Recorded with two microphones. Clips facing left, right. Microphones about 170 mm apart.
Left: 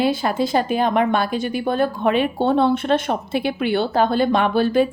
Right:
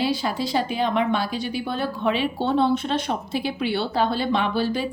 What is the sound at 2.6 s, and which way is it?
A woman's voice, 55° left (ahead or behind).